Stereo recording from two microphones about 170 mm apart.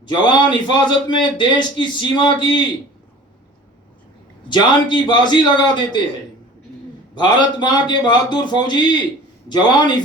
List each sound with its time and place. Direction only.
0.0 s a man's voice: 25° left (ahead or behind)
4.4 s a man's voice: 25° left (ahead or behind)
7.2 s a man's voice: 25° left (ahead or behind)